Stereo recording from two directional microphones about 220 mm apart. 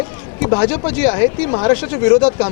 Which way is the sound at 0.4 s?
25° left (ahead or behind).